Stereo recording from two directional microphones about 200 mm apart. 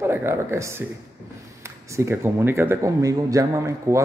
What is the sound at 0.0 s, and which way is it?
A man's voice, 10° right (ahead or behind).